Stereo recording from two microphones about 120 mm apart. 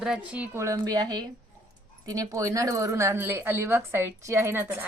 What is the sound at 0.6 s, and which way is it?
A woman's voice, 30° right (ahead or behind).